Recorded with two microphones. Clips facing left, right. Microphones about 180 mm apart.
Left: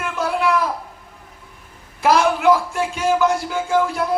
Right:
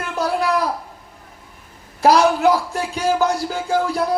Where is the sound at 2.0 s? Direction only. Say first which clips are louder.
Right 2 dB; 35° right (ahead or behind).